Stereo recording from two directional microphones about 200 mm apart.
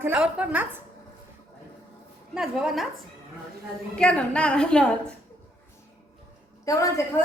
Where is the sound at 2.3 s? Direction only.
5° right (ahead or behind).